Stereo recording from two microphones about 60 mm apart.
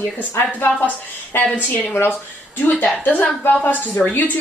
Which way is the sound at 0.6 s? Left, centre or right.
Left.